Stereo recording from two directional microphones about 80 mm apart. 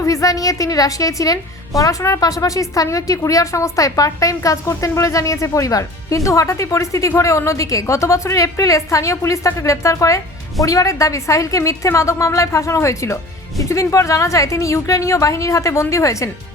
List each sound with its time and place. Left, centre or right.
0.0 s a woman's voice: left